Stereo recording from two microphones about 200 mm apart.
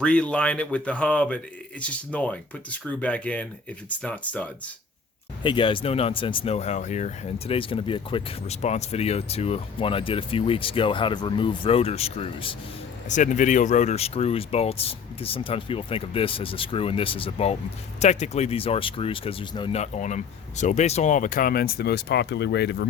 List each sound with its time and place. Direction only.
0.0 s speech: 5° left (ahead or behind)
5.4 s speech: 25° left (ahead or behind)
13.1 s speech: 40° left (ahead or behind); by 22.9 s 60° left (ahead or behind)